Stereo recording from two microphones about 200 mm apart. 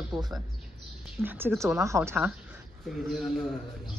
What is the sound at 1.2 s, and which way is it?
A woman's voice, 10° right (ahead or behind).